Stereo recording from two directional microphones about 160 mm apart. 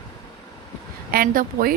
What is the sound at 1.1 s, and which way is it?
Speech, 60° right (ahead or behind).